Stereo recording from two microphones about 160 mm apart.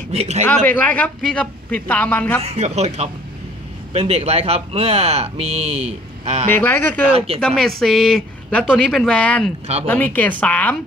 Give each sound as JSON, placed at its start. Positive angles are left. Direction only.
{"t": 0.1, "sound": "speech", "side_deg": -40}
{"t": 0.7, "sound": "a man's voice", "side_deg": 10}
{"t": 2.4, "sound": "speech", "side_deg": -40}
{"t": 6.5, "sound": "a man's voice", "side_deg": 10}